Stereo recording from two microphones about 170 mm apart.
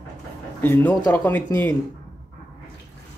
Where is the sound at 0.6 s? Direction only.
10° left (ahead or behind).